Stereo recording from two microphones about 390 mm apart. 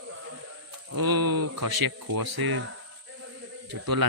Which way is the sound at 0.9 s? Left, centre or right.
Right.